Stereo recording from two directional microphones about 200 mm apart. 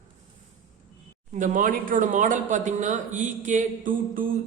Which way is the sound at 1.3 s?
40° right (ahead or behind).